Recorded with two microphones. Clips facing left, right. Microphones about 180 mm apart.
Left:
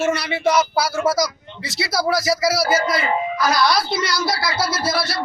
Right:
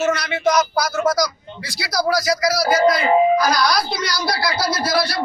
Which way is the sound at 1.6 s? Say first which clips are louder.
Left 5 dB; 25° left (ahead or behind).